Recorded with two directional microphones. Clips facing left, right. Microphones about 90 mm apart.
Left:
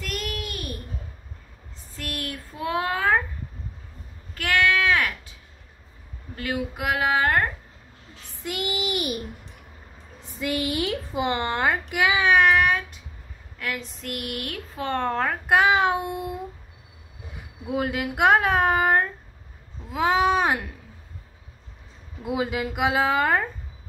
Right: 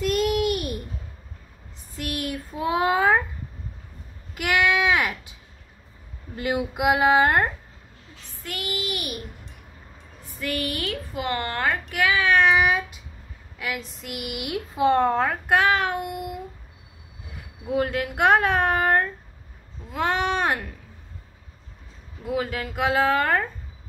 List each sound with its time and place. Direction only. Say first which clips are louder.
0.0 s a sound: right 10 dB; 20° right (ahead or behind)
2.0 s child singing: right 4 dB; 15° right (ahead or behind)
4.4 s a sound: right 1 dB; 15° right (ahead or behind)
6.3 s speech: right 3 dB; 20° right (ahead or behind)
8.5 s child singing: left 3 dB; 20° left (ahead or behind)
10.2 s a woman's voice: left 2 dB; 20° left (ahead or behind)
12.4 s a woman's voice: right 1 dB; centre (ahead or behind)
15.5 s child singing: left 2 dB; 15° left (ahead or behind)
17.6 s a woman's voice: right 2 dB; 5° left (ahead or behind)
22.2 s a woman's voice: left 1 dB; 10° left (ahead or behind)